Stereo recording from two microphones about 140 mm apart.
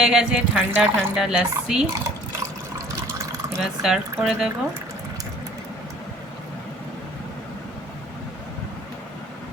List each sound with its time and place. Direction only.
0.0 s speech: 5° right (ahead or behind)
2.4 s water: 20° right (ahead or behind)
3.6 s speech: 5° right (ahead or behind)